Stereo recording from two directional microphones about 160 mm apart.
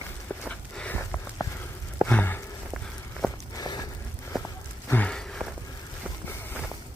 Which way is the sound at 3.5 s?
25° left (ahead or behind).